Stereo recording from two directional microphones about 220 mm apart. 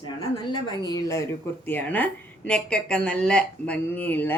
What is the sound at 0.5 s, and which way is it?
Speech, 15° left (ahead or behind).